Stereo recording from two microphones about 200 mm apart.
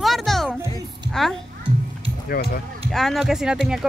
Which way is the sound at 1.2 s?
5° left (ahead or behind).